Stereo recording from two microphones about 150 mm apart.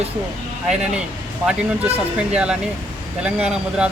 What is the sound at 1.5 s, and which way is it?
Speech, 10° right (ahead or behind).